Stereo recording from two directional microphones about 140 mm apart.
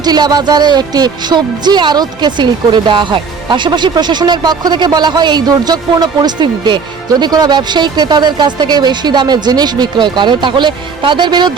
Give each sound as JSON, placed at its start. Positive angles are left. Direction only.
{"t": 0.0, "sound": "speech", "side_deg": -30}